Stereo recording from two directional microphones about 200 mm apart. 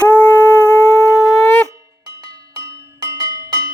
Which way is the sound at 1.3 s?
5° left (ahead or behind).